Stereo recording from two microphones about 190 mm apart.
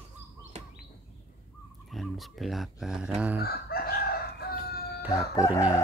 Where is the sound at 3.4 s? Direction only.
55° left (ahead or behind).